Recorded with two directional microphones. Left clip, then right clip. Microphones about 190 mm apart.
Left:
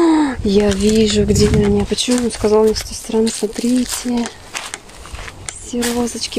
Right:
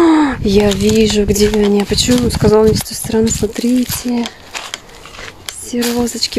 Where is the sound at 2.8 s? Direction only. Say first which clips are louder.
Right 2 dB; 25° right (ahead or behind).